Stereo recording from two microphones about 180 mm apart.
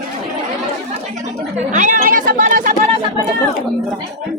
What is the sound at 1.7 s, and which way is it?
Speech, 45° right (ahead or behind).